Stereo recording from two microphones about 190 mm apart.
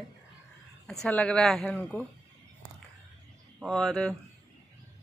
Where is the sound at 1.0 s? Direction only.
5° left (ahead or behind).